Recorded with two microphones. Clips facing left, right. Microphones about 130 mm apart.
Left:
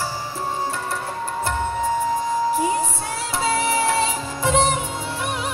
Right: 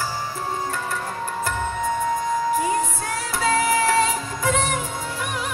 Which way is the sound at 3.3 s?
30° left (ahead or behind).